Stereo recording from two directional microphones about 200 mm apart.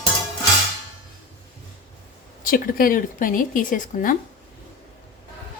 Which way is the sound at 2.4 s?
45° left (ahead or behind).